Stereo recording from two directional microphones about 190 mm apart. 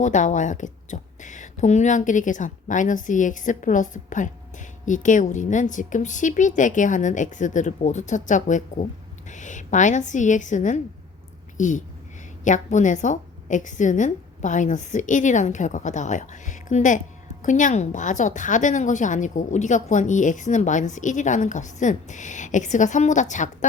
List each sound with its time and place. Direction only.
0.0 s a woman's voice: 40° left (ahead or behind)